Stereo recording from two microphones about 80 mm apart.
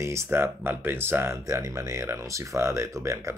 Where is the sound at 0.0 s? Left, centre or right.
Right.